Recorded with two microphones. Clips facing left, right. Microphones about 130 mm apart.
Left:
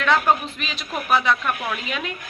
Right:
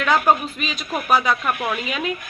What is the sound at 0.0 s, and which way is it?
Speech, 5° right (ahead or behind).